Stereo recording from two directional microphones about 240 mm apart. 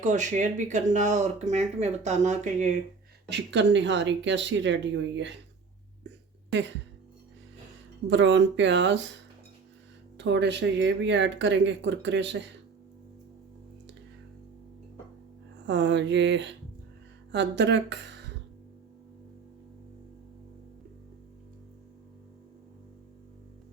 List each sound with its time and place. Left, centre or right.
0.0 s speech: right
3.2 s speech: right
8.1 s speech: right
15.6 s speech: right